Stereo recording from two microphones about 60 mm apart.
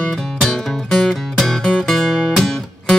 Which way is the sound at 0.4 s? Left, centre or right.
Centre.